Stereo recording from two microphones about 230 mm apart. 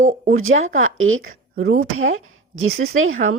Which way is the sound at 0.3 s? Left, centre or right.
Right.